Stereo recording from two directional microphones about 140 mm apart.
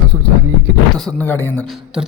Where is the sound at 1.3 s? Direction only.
15° left (ahead or behind).